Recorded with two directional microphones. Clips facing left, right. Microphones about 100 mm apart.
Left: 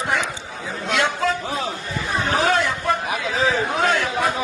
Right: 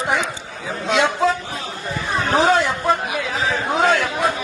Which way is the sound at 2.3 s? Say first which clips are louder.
Right 4 dB; 20° right (ahead or behind).